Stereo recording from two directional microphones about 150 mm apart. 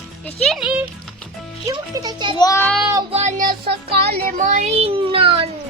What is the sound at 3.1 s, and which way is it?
Speech, 50° right (ahead or behind).